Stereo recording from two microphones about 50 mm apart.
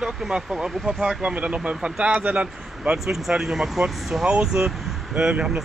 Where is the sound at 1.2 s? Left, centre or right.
Right.